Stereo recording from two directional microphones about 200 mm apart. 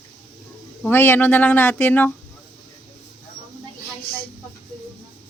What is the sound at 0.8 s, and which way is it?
Speech, 10° left (ahead or behind).